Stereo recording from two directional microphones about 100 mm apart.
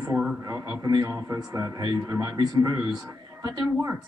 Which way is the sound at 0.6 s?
35° right (ahead or behind).